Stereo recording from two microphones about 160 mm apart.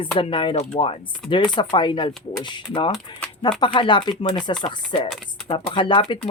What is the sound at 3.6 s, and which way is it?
Speech, 30° left (ahead or behind).